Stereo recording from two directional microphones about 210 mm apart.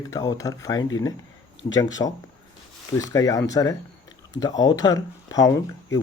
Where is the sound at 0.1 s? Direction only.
15° left (ahead or behind).